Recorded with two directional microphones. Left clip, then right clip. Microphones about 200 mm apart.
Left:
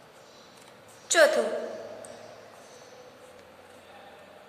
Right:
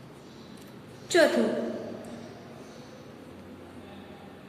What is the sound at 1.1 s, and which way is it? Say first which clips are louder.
Speech: left 2 dB; 30° left (ahead or behind).